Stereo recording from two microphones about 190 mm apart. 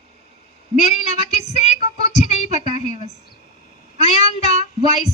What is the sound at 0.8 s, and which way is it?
Female singing, 40° left (ahead or behind).